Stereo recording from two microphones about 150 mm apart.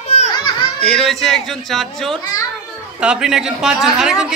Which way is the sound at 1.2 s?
Centre (ahead or behind).